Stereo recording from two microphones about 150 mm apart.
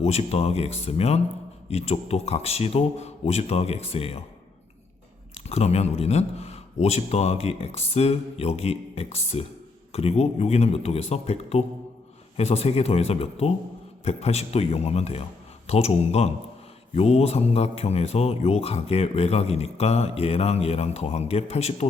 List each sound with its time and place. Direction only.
0.0 s speech: 45° left (ahead or behind)
5.5 s speech: 45° left (ahead or behind)